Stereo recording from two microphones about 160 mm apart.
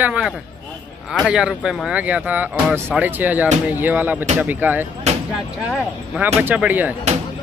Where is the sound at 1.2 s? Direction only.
5° right (ahead or behind).